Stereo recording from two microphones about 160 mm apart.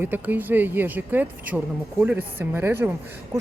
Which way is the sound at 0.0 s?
10° right (ahead or behind).